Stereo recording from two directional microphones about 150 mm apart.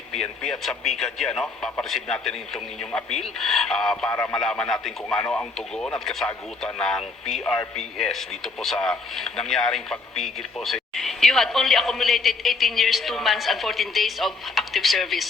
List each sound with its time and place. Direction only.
0.1 s speech: 5° left (ahead or behind)
4.1 s speech: 20° left (ahead or behind)
4.4 s speech: 5° left (ahead or behind)